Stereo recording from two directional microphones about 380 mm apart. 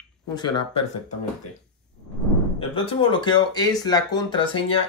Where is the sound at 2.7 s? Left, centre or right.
Centre.